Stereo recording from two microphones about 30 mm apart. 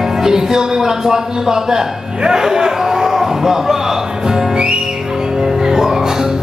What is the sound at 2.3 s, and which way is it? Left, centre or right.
Speech, centre.